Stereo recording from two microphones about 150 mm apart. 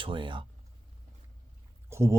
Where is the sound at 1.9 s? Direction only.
20° right (ahead or behind).